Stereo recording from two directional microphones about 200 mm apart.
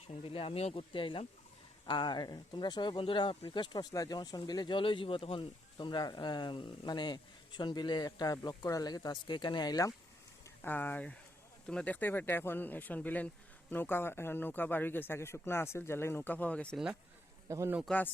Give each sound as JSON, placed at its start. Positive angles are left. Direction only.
{"t": 0.1, "sound": "a man's voice", "side_deg": 30}
{"t": 17.8, "sound": "speech", "side_deg": 5}